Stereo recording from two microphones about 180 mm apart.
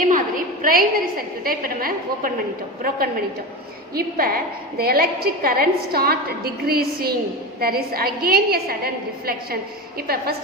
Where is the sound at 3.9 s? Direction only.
55° right (ahead or behind).